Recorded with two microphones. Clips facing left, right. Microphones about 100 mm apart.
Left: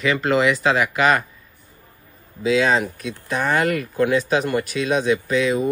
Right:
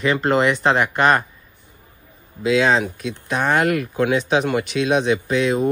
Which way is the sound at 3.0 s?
60° right (ahead or behind).